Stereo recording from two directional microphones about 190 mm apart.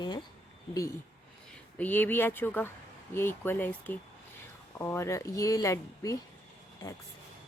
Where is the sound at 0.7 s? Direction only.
15° left (ahead or behind).